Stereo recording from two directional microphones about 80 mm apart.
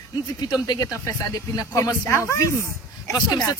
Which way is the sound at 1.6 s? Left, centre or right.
Left.